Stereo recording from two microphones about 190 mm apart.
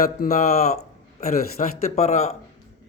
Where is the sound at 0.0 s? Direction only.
40° left (ahead or behind).